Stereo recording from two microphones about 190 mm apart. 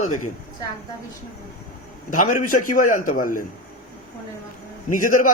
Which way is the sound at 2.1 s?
45° left (ahead or behind).